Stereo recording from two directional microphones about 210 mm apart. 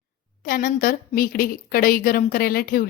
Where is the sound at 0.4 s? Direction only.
40° left (ahead or behind).